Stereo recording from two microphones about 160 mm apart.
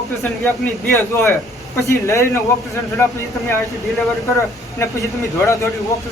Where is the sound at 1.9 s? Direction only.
20° left (ahead or behind).